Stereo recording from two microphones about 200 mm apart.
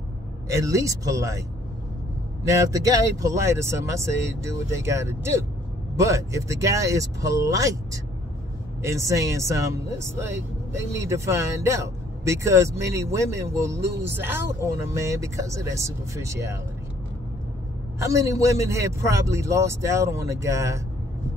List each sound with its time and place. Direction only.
0.5 s speech: 15° right (ahead or behind)
2.4 s speech: 15° right (ahead or behind)
18.0 s speech: 15° right (ahead or behind)